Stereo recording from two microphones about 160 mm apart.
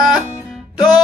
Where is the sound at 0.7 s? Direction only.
25° left (ahead or behind).